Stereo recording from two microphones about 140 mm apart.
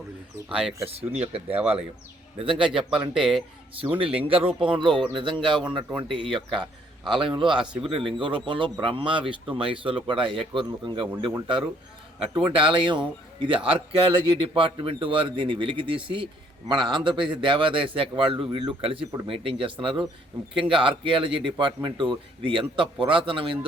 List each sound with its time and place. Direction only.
0.4 s speech: 5° right (ahead or behind)
1.2 s a man's voice: 45° right (ahead or behind)
2.9 s speech: centre (ahead or behind)
3.9 s a man's voice: 40° right (ahead or behind)